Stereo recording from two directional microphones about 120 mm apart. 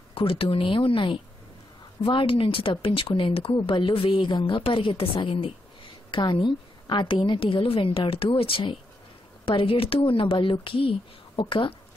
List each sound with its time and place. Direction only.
0.1 s a woman's voice: 50° left (ahead or behind)